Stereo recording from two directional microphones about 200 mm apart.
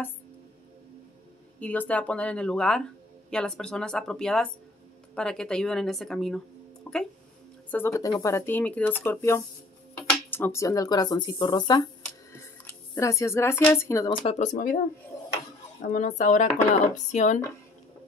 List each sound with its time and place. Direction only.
1.6 s speech: 5° left (ahead or behind)
12.0 s a sound: 10° left (ahead or behind)
14.2 s speech: 35° left (ahead or behind)
15.8 s speech: 40° left (ahead or behind)